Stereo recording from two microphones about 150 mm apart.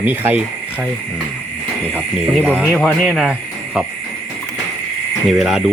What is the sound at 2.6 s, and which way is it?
Speech, 5° left (ahead or behind).